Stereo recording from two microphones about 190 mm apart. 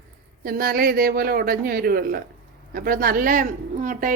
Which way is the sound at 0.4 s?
50° right (ahead or behind).